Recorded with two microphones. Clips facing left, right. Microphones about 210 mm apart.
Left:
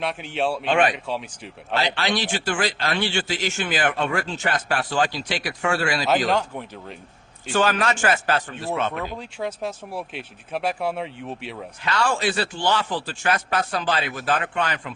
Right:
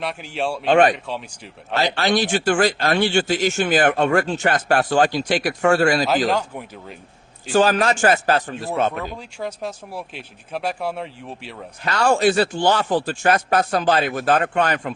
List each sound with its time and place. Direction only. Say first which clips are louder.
0.0 s speech: even; centre (ahead or behind)
0.6 s speech: right 7 dB; 40° right (ahead or behind)
0.9 s speech: left 1 dB; centre (ahead or behind)
1.7 s speech: right 4 dB; 45° right (ahead or behind)
6.1 s speech: right 1 dB; centre (ahead or behind)
7.5 s a man's voice: right 5 dB; 35° right (ahead or behind)
9.0 s speech: even; centre (ahead or behind)
11.8 s speech: right 6 dB; 45° right (ahead or behind)